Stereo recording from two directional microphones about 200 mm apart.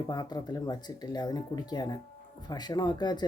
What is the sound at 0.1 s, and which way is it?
Speech, 20° left (ahead or behind).